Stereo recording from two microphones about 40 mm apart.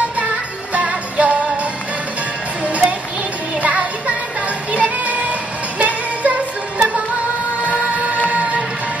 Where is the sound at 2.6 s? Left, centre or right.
Right.